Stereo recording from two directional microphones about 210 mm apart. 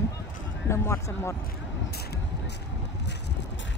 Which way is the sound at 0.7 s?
10° left (ahead or behind).